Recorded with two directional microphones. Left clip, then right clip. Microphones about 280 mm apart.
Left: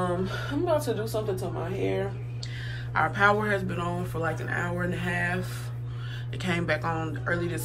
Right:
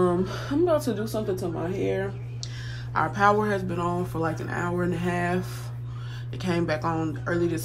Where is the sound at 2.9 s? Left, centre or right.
Centre.